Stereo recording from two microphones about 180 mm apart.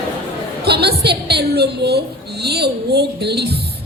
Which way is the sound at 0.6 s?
65° right (ahead or behind).